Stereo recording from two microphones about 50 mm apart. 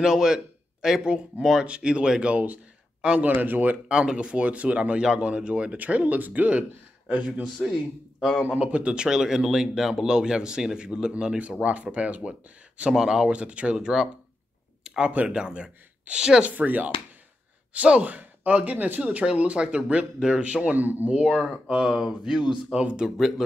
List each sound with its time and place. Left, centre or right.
0.0 s speech: centre
1.6 s speech: centre
2.3 s speech: right
3.9 s speech: centre
7.6 s a man's voice: centre
8.5 s speech: right
13.7 s speech: centre
15.0 s speech: right
16.4 s speech: right
20.7 s speech: right
21.2 s speech: right
21.7 s speech: centre
23.1 s a man's voice: centre